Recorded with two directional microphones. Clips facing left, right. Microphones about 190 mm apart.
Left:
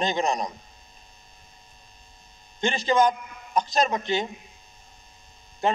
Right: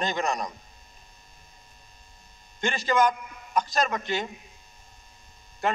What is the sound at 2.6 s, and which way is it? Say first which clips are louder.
A man's voice: left 2 dB; 20° left (ahead or behind).